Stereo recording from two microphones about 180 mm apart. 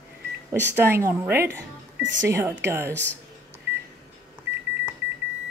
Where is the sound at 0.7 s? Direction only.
15° right (ahead or behind).